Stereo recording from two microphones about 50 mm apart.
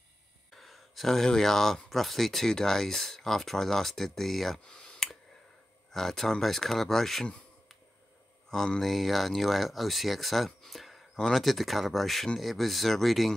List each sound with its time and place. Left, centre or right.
0.6 s speech: centre
4.6 s speech: left
5.9 s speech: centre
8.5 s speech: centre
8.8 s speech: centre